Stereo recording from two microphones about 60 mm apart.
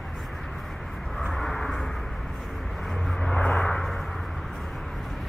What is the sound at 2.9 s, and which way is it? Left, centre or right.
Vehicle, centre.